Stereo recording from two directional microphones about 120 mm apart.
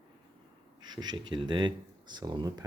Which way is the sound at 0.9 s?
35° right (ahead or behind).